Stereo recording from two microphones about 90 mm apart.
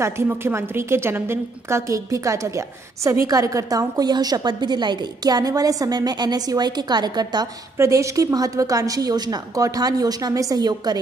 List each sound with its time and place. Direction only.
0.0 s a woman's voice: 25° right (ahead or behind); by 7.4 s 50° right (ahead or behind)
7.7 s a woman's voice: 35° right (ahead or behind)